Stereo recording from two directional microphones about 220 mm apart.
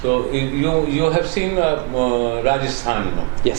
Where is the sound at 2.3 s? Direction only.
15° right (ahead or behind).